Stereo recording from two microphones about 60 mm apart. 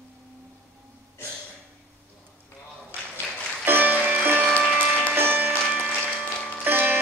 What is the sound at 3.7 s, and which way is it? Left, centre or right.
Music, right.